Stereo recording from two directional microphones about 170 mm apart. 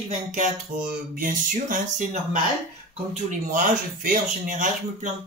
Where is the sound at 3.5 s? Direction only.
50° right (ahead or behind).